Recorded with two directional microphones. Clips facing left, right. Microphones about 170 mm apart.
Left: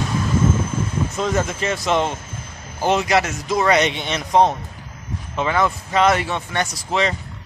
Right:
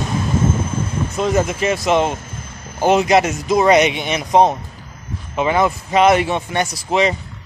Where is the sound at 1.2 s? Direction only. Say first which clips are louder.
Right 5 dB; 15° right (ahead or behind).